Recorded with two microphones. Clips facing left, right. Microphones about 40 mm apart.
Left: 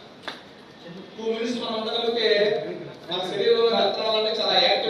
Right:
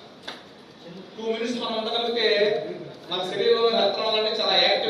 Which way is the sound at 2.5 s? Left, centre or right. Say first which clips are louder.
Even; left.